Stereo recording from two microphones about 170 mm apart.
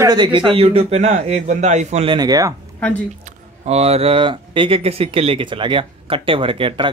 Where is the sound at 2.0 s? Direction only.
25° right (ahead or behind).